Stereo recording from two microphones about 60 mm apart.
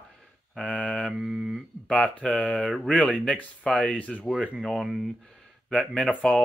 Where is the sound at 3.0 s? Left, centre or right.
Centre.